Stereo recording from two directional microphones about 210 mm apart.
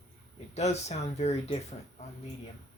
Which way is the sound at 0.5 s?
30° left (ahead or behind).